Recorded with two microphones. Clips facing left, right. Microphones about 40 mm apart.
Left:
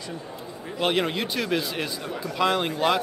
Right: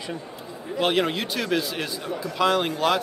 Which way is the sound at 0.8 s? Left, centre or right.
Centre.